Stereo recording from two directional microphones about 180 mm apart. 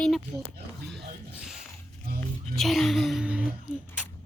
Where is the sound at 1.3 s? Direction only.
5° right (ahead or behind).